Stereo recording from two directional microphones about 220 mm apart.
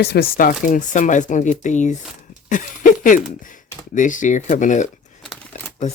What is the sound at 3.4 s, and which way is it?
Speech, 35° left (ahead or behind).